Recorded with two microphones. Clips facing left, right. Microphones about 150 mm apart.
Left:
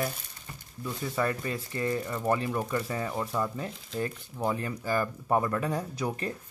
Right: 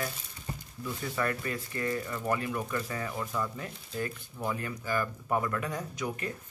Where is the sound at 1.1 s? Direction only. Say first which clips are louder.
Left 3 dB; 25° left (ahead or behind).